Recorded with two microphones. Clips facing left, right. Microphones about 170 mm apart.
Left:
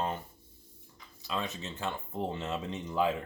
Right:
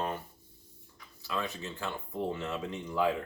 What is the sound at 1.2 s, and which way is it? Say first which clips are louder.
Speech: even; 20° left (ahead or behind).